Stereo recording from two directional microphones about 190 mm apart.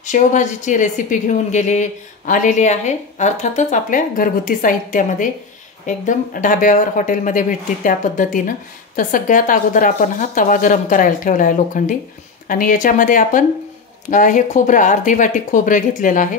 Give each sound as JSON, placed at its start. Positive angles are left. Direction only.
{"t": 0.0, "sound": "speech", "side_deg": 40}